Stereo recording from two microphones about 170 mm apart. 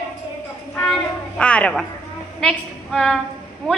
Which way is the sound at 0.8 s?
Centre (ahead or behind).